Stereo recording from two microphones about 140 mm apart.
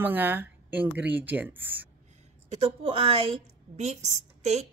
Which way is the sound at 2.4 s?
50° right (ahead or behind).